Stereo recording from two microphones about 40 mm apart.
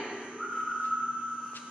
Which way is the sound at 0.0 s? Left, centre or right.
Centre.